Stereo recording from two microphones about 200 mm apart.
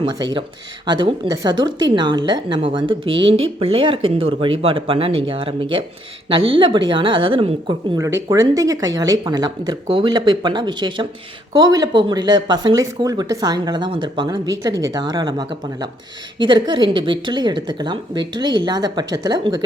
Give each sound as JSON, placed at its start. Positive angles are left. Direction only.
{"t": 0.0, "sound": "a woman's voice", "side_deg": -20}
{"t": 3.2, "sound": "speech", "side_deg": -90}
{"t": 3.6, "sound": "a woman's voice", "side_deg": -30}
{"t": 7.9, "sound": "a woman's voice", "side_deg": -15}